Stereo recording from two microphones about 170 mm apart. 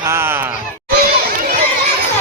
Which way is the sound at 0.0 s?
15° right (ahead or behind).